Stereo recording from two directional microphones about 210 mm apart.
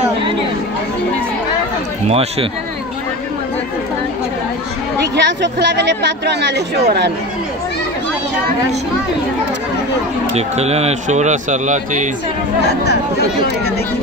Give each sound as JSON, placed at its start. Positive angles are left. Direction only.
{"t": 2.0, "sound": "speech", "side_deg": -30}
{"t": 5.1, "sound": "a woman's voice", "side_deg": -55}
{"t": 10.3, "sound": "speech", "side_deg": -30}
{"t": 12.6, "sound": "speech", "side_deg": 50}